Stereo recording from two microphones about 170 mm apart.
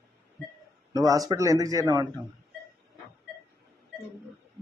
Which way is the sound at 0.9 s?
20° right (ahead or behind).